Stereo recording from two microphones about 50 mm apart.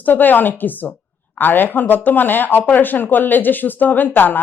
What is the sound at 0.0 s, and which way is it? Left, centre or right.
Speech, left.